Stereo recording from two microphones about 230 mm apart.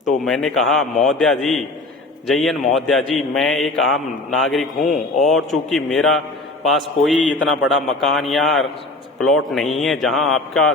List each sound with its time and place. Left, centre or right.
0.3 s a man's voice: centre